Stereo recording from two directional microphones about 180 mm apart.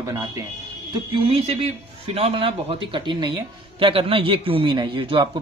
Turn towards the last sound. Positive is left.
turn(degrees=-25)  # may be behind; listen again after turning